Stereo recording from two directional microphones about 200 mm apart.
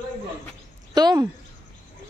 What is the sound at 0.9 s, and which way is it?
Speech, 20° right (ahead or behind).